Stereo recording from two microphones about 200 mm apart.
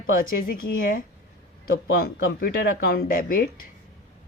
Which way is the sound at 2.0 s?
50° left (ahead or behind).